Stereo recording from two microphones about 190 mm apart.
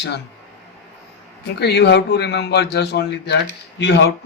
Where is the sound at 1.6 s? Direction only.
60° left (ahead or behind).